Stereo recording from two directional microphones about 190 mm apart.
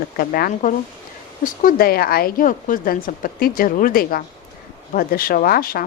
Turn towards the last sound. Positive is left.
turn(degrees=50)  # may be behind; listen again after turning